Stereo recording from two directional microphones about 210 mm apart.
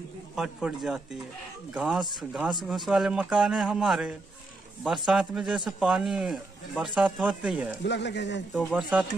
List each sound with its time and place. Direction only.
0.4 s a man's voice: centre (ahead or behind)
7.8 s speech: 55° left (ahead or behind)
8.5 s a man's voice: centre (ahead or behind)